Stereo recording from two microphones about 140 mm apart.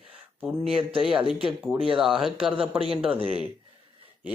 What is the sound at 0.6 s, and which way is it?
Speech, 40° right (ahead or behind).